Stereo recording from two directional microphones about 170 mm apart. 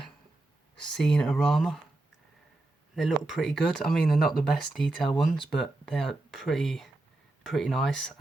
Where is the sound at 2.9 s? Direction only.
Centre (ahead or behind).